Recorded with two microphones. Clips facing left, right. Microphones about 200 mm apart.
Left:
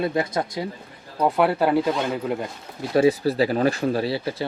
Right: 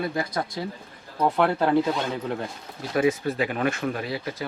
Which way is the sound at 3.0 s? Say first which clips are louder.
Left 5 dB; 35° left (ahead or behind).